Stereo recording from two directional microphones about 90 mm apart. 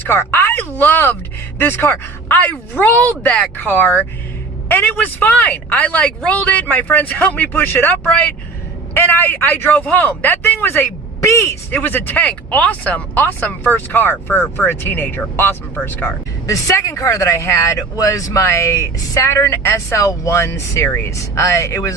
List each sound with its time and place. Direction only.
0.0 s speech: 25° left (ahead or behind)
11.7 s speech: 20° left (ahead or behind)
16.5 s speech: 35° left (ahead or behind)